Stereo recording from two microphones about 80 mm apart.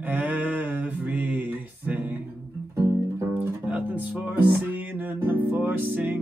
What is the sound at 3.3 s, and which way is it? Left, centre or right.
Music, centre.